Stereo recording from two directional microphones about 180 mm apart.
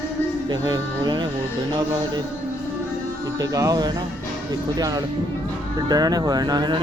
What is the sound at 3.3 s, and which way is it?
Speech, 20° right (ahead or behind).